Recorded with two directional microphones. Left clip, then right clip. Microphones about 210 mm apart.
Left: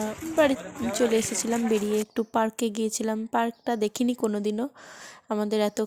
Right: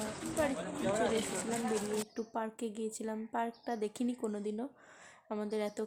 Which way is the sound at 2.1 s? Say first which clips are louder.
Left 13 dB; 45° left (ahead or behind).